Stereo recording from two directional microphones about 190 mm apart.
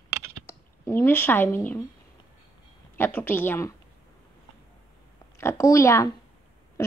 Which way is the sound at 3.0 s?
10° left (ahead or behind).